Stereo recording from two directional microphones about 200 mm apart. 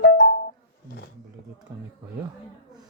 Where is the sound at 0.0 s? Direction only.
55° left (ahead or behind).